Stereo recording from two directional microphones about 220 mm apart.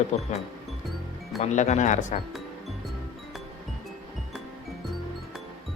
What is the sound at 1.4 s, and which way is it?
Speech, 30° left (ahead or behind).